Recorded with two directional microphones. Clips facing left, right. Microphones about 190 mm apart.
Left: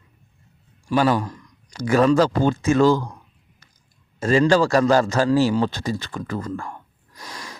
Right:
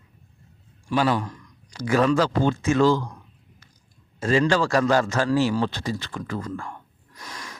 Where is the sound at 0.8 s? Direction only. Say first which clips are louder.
Left 3 dB; 40° left (ahead or behind).